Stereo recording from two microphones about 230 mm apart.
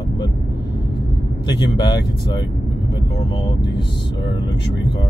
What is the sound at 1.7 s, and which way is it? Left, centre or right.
Speech, centre.